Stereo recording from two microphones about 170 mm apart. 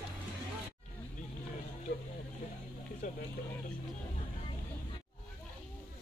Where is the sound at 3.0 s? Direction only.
50° left (ahead or behind).